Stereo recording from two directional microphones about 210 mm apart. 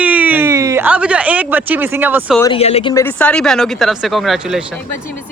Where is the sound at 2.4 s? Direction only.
25° left (ahead or behind).